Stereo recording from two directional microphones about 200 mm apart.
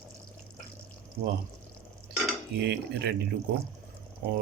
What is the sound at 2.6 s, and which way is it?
Speech, 55° right (ahead or behind).